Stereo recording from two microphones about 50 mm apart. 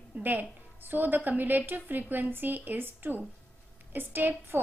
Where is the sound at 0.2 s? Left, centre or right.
Right.